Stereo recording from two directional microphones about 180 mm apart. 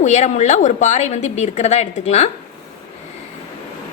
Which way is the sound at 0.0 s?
40° left (ahead or behind).